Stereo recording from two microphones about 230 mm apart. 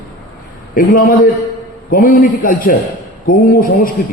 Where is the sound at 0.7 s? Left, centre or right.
Left.